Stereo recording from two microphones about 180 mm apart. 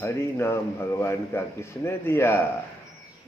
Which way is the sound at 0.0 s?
15° left (ahead or behind).